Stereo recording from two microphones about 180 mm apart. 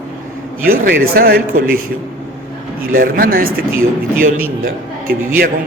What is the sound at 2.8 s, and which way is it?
Speech, 55° right (ahead or behind).